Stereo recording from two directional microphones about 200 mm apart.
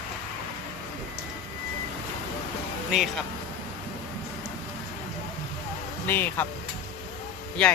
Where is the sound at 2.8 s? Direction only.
Centre (ahead or behind).